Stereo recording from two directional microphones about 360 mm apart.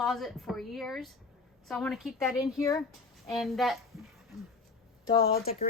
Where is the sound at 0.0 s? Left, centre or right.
Centre.